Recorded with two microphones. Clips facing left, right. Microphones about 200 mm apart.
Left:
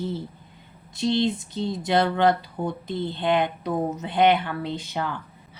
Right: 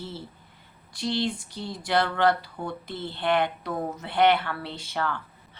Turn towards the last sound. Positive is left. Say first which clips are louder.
# left 1 dB
turn(degrees=15)  # may be behind; listen again after turning